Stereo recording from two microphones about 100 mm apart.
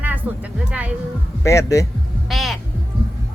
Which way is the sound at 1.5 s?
30° left (ahead or behind).